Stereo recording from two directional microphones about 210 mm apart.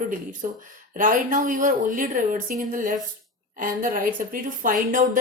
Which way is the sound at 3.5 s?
40° right (ahead or behind).